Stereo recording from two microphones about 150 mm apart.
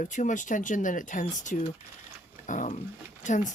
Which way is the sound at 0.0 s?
55° left (ahead or behind).